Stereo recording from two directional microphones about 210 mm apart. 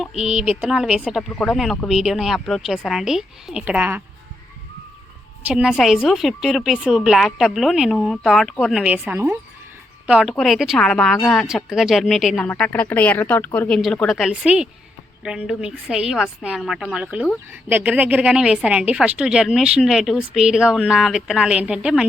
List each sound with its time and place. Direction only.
0.0 s a woman's voice: centre (ahead or behind)
5.5 s a woman's voice: 5° right (ahead or behind)